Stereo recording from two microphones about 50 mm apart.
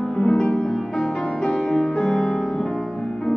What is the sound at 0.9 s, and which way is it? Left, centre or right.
Music, centre.